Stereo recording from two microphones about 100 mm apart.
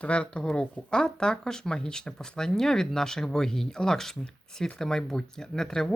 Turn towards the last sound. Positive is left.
turn(degrees=5)  # may be behind; listen again after turning